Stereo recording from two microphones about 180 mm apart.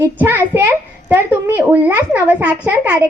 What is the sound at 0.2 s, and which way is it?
A woman's voice, 10° right (ahead or behind).